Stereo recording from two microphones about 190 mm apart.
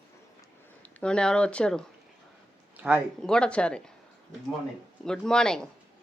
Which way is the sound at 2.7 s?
10° right (ahead or behind).